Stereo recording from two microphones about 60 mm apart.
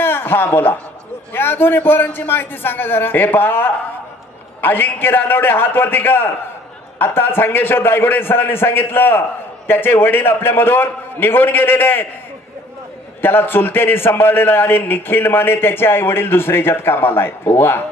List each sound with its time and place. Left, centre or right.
0.0 s chuckle: left
1.3 s a man's voice: left
13.2 s a man's voice: left